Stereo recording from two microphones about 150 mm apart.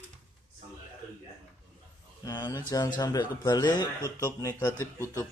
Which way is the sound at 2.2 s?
25° left (ahead or behind).